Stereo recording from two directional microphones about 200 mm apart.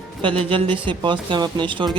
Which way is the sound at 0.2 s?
25° right (ahead or behind).